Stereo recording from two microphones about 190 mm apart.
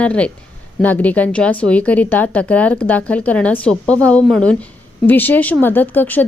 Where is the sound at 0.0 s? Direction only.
5° left (ahead or behind).